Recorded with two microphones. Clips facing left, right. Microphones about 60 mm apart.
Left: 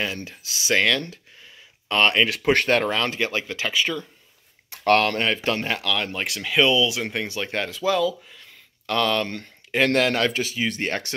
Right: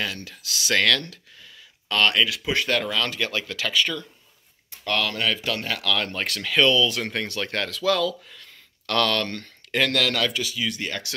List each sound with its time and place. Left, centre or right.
0.0 s speech: left
2.2 s speech: left
2.7 s speech: left
4.8 s speech: left
5.2 s speech: left
5.9 s speech: centre
9.8 s speech: left